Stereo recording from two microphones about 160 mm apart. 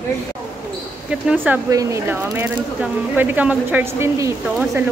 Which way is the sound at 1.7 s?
20° right (ahead or behind).